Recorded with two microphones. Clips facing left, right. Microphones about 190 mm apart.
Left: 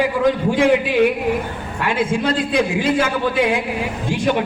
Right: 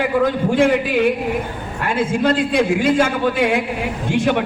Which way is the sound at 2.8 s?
50° right (ahead or behind).